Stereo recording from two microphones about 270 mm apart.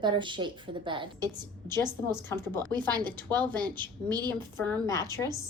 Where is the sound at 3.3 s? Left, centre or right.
Centre.